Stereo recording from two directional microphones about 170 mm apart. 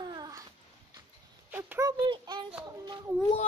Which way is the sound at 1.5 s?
10° right (ahead or behind).